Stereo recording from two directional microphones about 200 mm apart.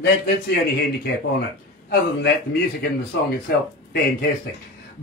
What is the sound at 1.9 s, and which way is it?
A man's voice, 50° left (ahead or behind).